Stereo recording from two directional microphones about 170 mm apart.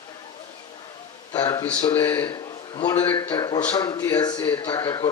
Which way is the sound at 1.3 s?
25° left (ahead or behind).